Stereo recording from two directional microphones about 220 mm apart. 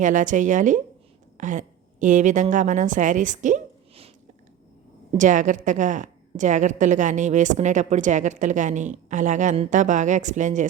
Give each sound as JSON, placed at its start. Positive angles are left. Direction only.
{"t": 0.0, "sound": "a woman's voice", "side_deg": -35}
{"t": 5.1, "sound": "a woman's voice", "side_deg": -35}